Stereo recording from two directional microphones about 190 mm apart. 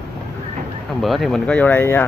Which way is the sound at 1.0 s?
Centre (ahead or behind).